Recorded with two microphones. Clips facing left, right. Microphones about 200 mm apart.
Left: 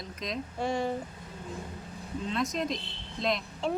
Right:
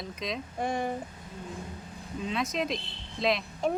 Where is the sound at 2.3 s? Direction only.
Centre (ahead or behind).